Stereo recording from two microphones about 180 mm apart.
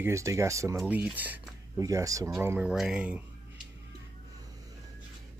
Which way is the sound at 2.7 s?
5° right (ahead or behind).